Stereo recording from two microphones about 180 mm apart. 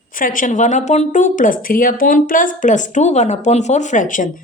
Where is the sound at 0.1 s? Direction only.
50° left (ahead or behind).